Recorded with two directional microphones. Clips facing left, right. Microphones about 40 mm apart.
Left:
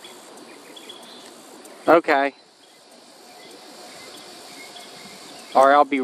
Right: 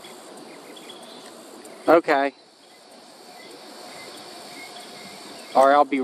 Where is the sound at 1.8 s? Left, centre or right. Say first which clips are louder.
Left 1 dB; left.